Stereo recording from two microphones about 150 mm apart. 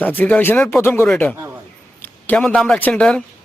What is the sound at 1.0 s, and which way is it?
Speech, 5° left (ahead or behind).